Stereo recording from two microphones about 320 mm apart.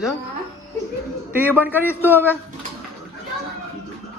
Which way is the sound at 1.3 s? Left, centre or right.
Centre.